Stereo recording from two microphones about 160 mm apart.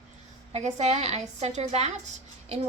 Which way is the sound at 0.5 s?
45° right (ahead or behind).